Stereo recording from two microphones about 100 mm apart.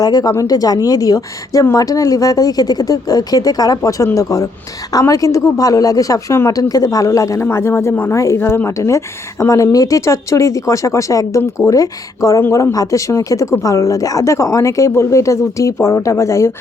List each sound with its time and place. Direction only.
0.0 s speech: 40° left (ahead or behind)
7.4 s a woman's voice: 25° left (ahead or behind)
12.4 s speech: 25° left (ahead or behind)